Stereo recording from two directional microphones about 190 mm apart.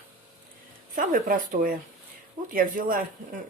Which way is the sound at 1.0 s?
45° right (ahead or behind).